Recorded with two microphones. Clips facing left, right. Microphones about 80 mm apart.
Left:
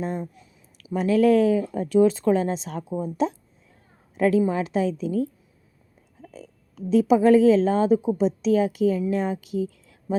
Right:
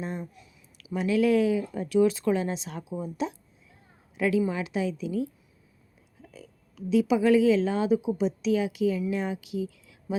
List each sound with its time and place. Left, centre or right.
0.0 s a sound: left
0.9 s a woman's voice: left
6.2 s a woman's voice: left